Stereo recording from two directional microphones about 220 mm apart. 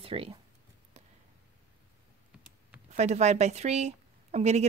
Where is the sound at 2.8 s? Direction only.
30° right (ahead or behind).